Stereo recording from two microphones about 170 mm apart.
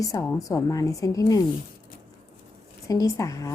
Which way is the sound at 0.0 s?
20° left (ahead or behind).